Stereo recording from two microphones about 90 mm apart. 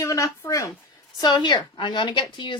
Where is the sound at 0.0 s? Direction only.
35° left (ahead or behind).